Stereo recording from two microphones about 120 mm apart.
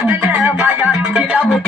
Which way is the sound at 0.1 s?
15° right (ahead or behind).